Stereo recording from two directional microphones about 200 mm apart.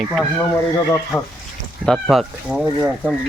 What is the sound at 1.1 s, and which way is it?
Speech, 15° left (ahead or behind).